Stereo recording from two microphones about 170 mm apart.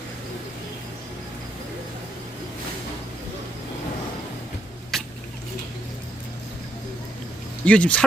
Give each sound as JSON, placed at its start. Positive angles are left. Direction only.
{"t": 4.9, "sound": "rodents", "side_deg": 0}
{"t": 7.6, "sound": "speech", "side_deg": 5}